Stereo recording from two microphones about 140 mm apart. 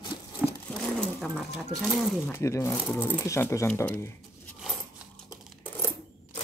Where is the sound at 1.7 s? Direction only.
Centre (ahead or behind).